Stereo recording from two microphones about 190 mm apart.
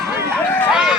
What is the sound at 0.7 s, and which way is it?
Run, 5° right (ahead or behind).